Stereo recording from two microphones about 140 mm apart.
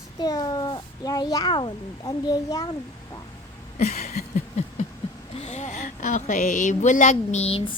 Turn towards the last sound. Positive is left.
turn(degrees=45)  # may be behind; listen again after turning